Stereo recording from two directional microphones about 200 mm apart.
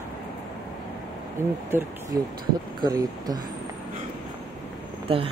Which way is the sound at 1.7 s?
10° right (ahead or behind).